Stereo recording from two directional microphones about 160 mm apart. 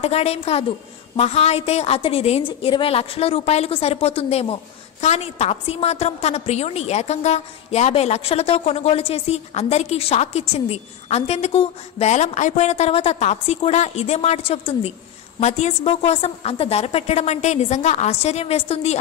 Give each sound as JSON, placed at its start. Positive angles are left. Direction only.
{"t": 0.0, "sound": "a woman's voice", "side_deg": 40}